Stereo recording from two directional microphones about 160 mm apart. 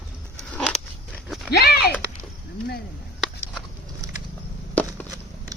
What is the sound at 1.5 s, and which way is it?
Speech, 85° left.